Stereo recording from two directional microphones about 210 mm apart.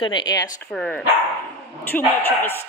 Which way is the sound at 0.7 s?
Centre (ahead or behind).